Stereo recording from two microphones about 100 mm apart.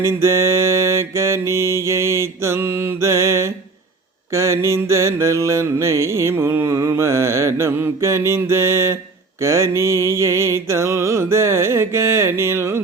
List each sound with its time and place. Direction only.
0.0 s mantra: 25° right (ahead or behind)